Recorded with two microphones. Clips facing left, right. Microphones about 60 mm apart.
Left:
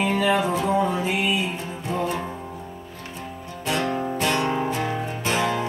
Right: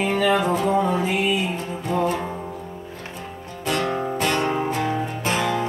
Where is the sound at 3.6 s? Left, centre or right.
Right.